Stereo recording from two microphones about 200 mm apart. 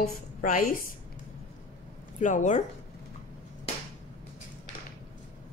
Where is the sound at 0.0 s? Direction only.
40° left (ahead or behind).